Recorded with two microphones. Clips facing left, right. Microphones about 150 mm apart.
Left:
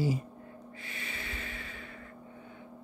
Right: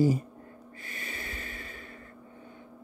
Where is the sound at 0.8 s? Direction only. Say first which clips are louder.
Right 2 dB; 45° right (ahead or behind).